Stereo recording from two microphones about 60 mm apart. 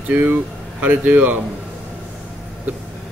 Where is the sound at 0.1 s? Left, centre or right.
Right.